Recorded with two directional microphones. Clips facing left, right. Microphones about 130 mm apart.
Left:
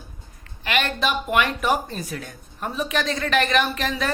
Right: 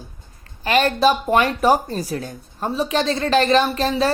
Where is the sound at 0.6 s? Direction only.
35° right (ahead or behind).